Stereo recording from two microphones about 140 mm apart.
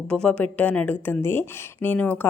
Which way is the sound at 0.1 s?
5° left (ahead or behind).